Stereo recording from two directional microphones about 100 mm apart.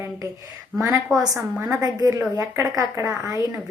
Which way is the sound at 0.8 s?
35° right (ahead or behind).